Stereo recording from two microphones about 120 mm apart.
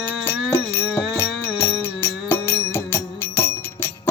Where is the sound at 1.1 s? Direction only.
20° left (ahead or behind).